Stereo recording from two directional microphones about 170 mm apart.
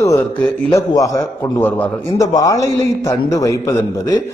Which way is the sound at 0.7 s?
20° left (ahead or behind).